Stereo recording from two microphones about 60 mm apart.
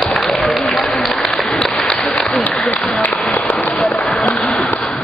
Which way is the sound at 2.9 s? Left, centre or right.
Left.